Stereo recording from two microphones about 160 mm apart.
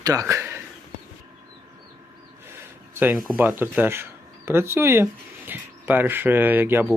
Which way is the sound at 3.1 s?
5° right (ahead or behind).